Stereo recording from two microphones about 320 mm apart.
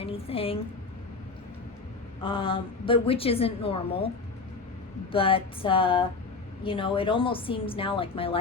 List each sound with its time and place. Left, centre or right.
0.0 s a woman's voice: centre
2.2 s a woman's voice: centre
5.1 s a woman's voice: centre